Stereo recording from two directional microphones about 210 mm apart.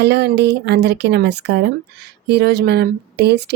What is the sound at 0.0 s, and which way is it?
Speech, 55° right (ahead or behind).